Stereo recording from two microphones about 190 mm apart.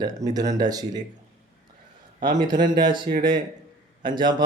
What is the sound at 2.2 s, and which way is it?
Speech, 25° right (ahead or behind).